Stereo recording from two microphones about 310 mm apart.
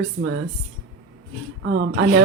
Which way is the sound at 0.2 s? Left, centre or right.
Right.